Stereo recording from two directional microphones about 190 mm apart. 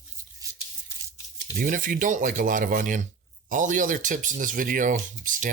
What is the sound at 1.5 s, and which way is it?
Speech, 45° right (ahead or behind).